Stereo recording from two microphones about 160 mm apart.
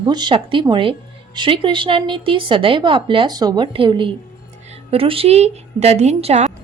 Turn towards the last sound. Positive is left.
turn(degrees=-40)  # may be behind; listen again after turning